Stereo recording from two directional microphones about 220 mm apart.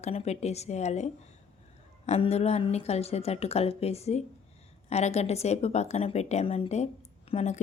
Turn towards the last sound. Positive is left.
turn(degrees=30)  # may be behind; listen again after turning